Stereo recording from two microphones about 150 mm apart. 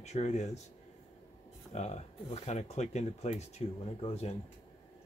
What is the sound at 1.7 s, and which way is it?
Speech, 50° left (ahead or behind).